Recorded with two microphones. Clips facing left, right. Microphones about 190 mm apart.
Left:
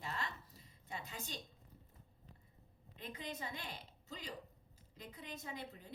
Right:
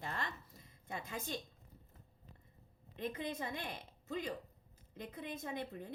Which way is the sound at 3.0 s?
50° right (ahead or behind).